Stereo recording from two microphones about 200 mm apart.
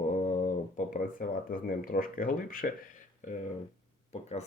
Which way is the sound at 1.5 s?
45° left (ahead or behind).